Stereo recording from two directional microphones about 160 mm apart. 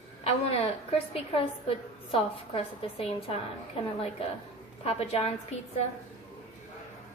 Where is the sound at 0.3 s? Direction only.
40° left (ahead or behind).